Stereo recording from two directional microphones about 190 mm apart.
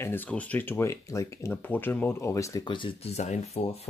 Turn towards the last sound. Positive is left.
turn(degrees=35)  # may be behind; listen again after turning